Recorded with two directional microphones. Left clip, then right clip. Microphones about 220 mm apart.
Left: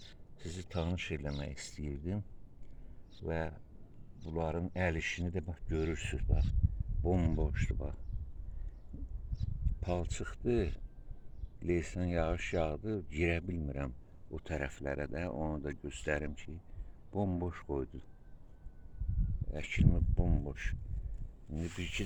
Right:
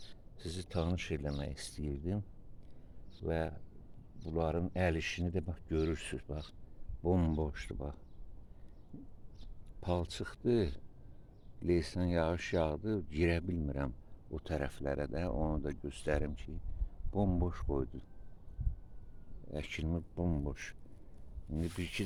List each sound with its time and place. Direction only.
0.7 s speech: 10° right (ahead or behind)
3.2 s speech: 10° right (ahead or behind)
9.8 s speech: 5° right (ahead or behind)
19.5 s speech: 10° right (ahead or behind)